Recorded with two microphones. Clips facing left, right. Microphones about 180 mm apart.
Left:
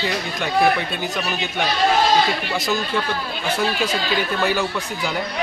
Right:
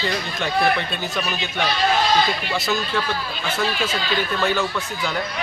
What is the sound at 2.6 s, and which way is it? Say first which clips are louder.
Speech: even; 15° left (ahead or behind).